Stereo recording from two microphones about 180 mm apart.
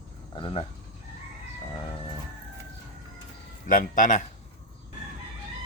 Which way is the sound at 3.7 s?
45° left (ahead or behind).